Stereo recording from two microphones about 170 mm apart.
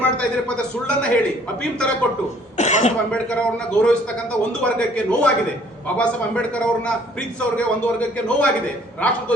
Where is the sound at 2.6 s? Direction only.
45° left (ahead or behind).